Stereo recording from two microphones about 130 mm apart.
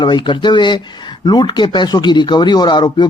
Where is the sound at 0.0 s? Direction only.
35° left (ahead or behind).